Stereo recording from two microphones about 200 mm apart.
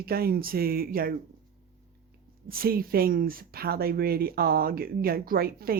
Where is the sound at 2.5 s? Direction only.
50° right (ahead or behind).